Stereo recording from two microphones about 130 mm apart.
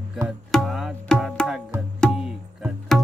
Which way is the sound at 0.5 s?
Centre (ahead or behind).